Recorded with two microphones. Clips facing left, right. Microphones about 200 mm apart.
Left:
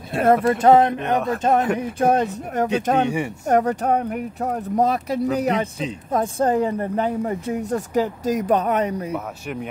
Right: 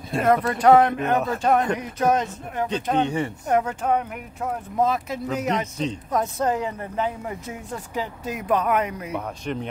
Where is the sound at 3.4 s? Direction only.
40° left (ahead or behind).